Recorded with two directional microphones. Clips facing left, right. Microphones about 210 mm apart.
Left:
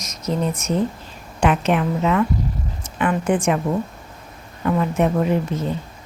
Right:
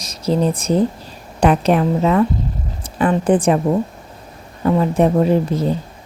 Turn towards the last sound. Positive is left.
turn(degrees=-35)  # may be behind; listen again after turning